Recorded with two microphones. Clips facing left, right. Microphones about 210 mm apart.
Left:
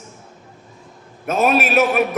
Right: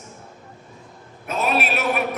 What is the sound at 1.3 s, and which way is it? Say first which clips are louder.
Speech: left 6 dB; 45° left (ahead or behind).